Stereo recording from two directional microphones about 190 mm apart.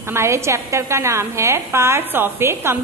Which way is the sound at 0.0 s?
15° right (ahead or behind).